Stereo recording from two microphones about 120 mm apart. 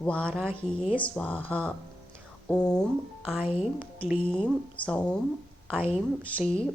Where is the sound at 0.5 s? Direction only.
55° left (ahead or behind).